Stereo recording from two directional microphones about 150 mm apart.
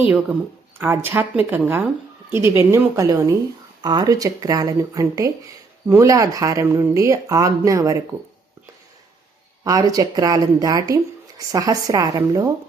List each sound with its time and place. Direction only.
0.8 s speech: 15° right (ahead or behind)
9.6 s speech: 25° right (ahead or behind)